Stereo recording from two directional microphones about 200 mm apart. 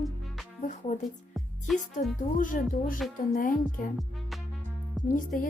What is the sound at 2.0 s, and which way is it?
Speech, 40° left (ahead or behind).